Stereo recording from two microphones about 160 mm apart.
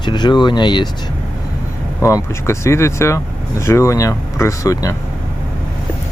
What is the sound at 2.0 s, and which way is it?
Speech, 20° left (ahead or behind).